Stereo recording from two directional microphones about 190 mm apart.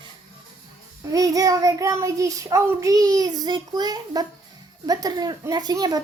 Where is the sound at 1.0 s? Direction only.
20° right (ahead or behind).